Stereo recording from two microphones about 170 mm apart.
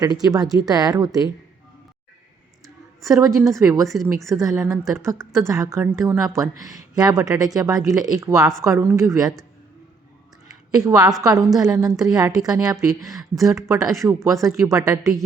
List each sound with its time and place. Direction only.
0.0 s speech: 20° right (ahead or behind)
3.2 s a woman's voice: 20° right (ahead or behind)
10.7 s speech: 20° right (ahead or behind)
13.1 s speech: centre (ahead or behind)
13.4 s a woman's voice: 15° right (ahead or behind)
14.3 s speech: centre (ahead or behind)
14.7 s speech: 20° right (ahead or behind)